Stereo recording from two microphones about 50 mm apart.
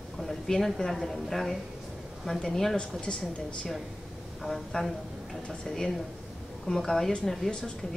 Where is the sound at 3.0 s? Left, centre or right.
Centre.